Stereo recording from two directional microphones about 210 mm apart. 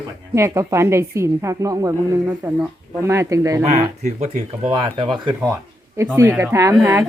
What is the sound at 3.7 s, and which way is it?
A woman's voice, 30° right (ahead or behind).